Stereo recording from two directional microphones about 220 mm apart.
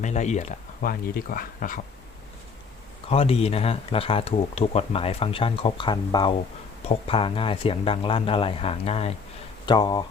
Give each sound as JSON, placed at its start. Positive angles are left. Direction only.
{"t": 0.0, "sound": "speech", "side_deg": 30}
{"t": 3.1, "sound": "speech", "side_deg": 25}